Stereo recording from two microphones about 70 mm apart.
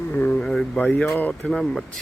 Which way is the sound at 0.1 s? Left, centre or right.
Left.